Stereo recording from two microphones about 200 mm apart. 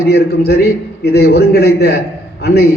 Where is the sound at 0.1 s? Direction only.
55° left (ahead or behind).